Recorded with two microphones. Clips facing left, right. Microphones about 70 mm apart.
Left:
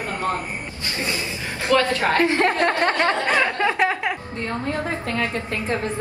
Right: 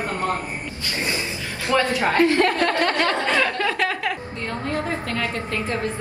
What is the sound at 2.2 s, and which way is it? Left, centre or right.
Speech, left.